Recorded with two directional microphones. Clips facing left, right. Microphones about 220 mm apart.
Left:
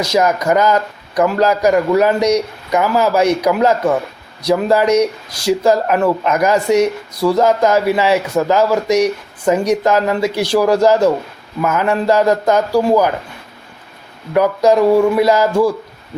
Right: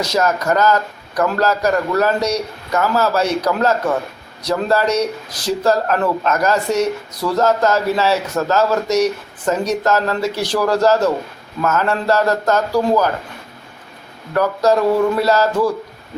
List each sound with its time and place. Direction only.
0.0 s speech: 10° left (ahead or behind)
14.3 s speech: 15° left (ahead or behind)